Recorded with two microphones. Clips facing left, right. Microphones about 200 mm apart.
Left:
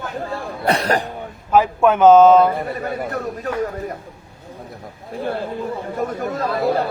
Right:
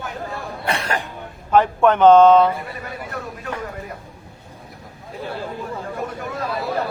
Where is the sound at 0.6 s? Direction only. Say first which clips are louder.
Left 6 dB; 40° left (ahead or behind).